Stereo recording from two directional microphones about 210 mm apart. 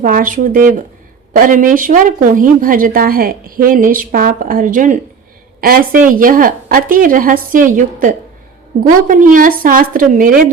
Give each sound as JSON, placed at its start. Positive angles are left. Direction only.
{"t": 0.0, "sound": "speech", "side_deg": -40}